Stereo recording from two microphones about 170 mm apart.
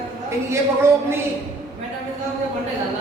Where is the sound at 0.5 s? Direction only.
15° right (ahead or behind).